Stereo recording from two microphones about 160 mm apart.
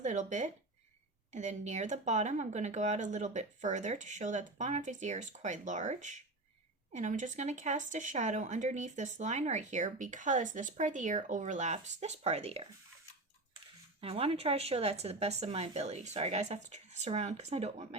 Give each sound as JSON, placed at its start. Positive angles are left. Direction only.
{"t": 0.0, "sound": "speech", "side_deg": -50}
{"t": 14.0, "sound": "speech", "side_deg": -35}